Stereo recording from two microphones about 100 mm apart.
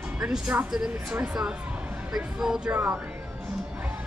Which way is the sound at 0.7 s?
5° right (ahead or behind).